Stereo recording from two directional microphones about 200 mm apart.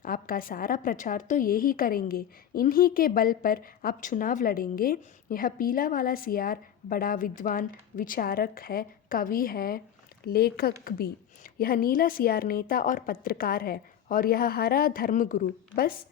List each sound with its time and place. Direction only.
0.0 s a woman's voice: 45° left (ahead or behind)